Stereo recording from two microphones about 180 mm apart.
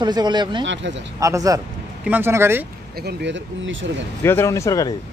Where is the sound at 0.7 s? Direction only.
85° right.